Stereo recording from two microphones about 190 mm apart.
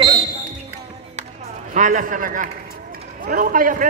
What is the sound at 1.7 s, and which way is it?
A man's voice, 40° right (ahead or behind).